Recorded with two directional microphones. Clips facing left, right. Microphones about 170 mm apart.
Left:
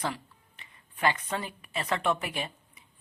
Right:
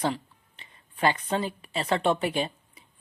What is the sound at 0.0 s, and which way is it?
Speech, 30° right (ahead or behind).